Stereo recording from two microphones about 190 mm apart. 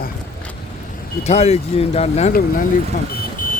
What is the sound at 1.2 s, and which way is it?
Speech, 35° left (ahead or behind).